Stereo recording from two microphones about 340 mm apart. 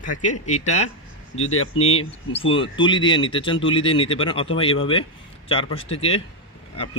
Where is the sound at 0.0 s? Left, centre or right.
Left.